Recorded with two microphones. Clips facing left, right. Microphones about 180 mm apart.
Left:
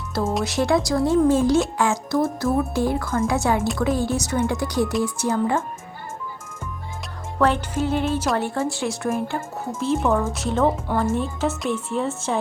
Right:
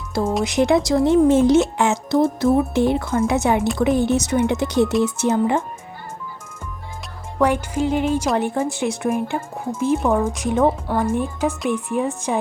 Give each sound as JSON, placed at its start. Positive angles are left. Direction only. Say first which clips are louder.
{"t": 0.4, "sound": "speech", "louder": "right 5 dB", "side_deg": -20}
{"t": 7.3, "sound": "speech", "louder": "right 2 dB", "side_deg": -10}